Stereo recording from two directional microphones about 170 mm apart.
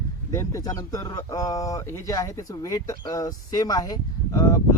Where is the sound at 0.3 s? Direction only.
20° left (ahead or behind).